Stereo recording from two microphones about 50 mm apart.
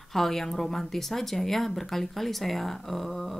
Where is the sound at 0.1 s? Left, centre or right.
Centre.